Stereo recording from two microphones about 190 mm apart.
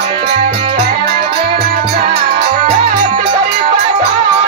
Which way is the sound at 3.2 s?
25° right (ahead or behind).